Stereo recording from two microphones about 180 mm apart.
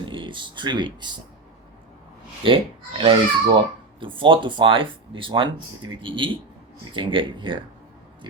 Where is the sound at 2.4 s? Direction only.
30° right (ahead or behind).